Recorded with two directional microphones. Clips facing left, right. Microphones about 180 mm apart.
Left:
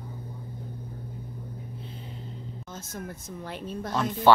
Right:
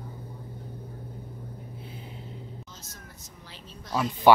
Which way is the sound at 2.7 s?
55° left (ahead or behind).